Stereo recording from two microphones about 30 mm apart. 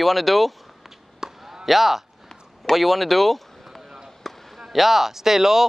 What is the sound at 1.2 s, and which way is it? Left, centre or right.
Chop, centre.